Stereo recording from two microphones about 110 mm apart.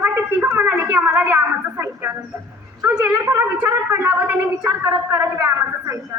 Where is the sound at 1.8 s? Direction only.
20° right (ahead or behind).